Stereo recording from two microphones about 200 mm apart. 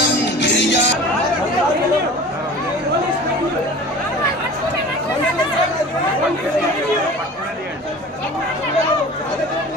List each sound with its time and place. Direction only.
0.3 s music: 60° left (ahead or behind)